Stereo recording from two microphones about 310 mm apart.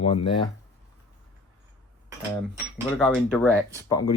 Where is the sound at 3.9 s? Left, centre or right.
Centre.